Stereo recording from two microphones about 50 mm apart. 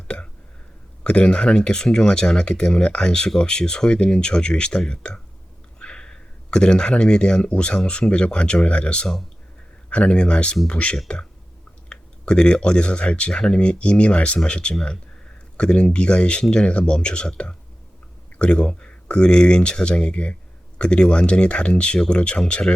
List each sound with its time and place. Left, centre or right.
1.0 s speech: left
21.9 s speech: centre
22.2 s speech: left